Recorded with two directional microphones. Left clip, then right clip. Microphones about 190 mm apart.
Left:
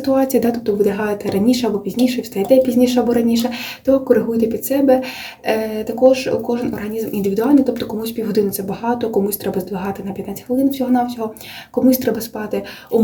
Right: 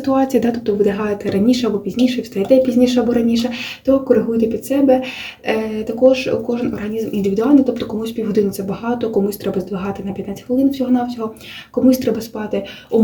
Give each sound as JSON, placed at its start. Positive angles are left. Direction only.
{"t": 0.0, "sound": "speech", "side_deg": -5}